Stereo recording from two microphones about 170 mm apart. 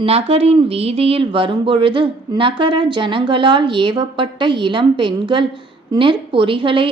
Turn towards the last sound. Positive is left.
turn(degrees=-30)  # may be behind; listen again after turning